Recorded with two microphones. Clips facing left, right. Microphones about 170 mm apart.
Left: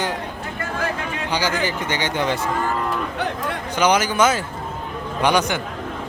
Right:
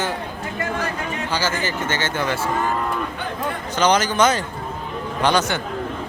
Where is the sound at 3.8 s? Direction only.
10° left (ahead or behind).